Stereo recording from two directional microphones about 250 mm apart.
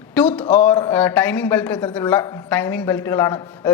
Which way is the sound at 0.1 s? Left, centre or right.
Centre.